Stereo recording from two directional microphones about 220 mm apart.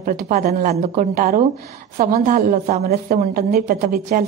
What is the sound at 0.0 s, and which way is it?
A woman's voice, 40° right (ahead or behind).